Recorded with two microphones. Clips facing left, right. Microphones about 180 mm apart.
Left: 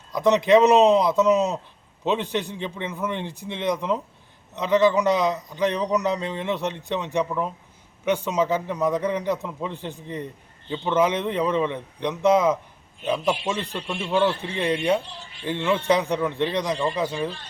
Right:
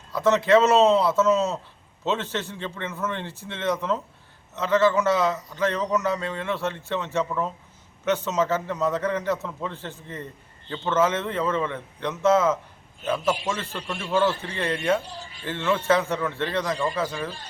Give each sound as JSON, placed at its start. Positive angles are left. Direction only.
{"t": 0.1, "sound": "a man's voice", "side_deg": 15}
{"t": 15.0, "sound": "speech", "side_deg": -40}
{"t": 15.4, "sound": "a man's voice", "side_deg": 15}